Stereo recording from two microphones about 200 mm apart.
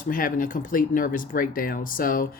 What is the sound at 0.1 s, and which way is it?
Speech, 45° left (ahead or behind).